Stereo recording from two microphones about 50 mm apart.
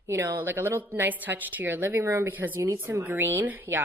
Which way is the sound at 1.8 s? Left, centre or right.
Right.